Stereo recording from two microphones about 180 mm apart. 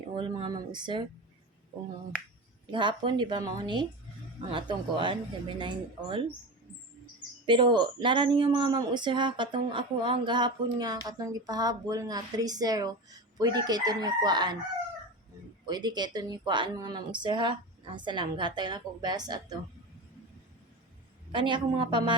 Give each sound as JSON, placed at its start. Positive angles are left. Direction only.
{"t": 0.1, "sound": "speech", "side_deg": -25}
{"t": 2.7, "sound": "speech", "side_deg": -25}
{"t": 7.4, "sound": "speech", "side_deg": -25}
{"t": 15.6, "sound": "speech", "side_deg": -25}
{"t": 21.3, "sound": "speech", "side_deg": -25}